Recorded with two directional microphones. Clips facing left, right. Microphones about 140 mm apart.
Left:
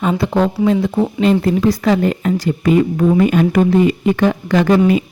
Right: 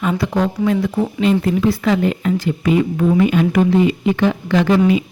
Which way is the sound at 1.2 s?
40° left (ahead or behind).